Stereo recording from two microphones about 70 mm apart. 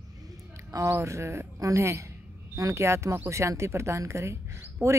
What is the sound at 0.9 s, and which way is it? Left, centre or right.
A woman's voice, right.